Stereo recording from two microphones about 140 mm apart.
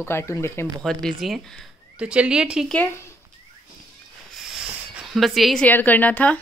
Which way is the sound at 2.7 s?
15° left (ahead or behind).